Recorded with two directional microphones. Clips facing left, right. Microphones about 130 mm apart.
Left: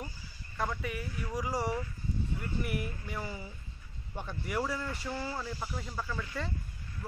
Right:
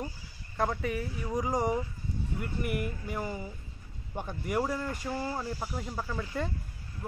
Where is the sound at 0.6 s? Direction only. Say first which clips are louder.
Right 5 dB; 30° right (ahead or behind).